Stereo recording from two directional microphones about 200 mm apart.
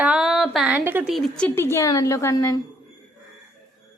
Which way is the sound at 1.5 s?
10° left (ahead or behind).